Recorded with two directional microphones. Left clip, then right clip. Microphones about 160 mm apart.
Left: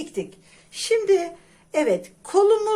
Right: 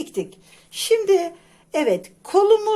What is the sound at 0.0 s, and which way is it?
Speech, 45° right (ahead or behind).